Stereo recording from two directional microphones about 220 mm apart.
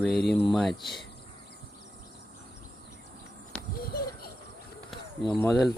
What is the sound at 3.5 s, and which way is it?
Bird, 5° left (ahead or behind).